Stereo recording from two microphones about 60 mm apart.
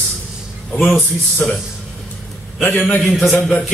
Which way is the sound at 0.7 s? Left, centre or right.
Centre.